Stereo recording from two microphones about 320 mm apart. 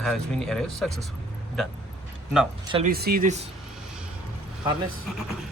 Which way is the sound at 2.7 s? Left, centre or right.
Right.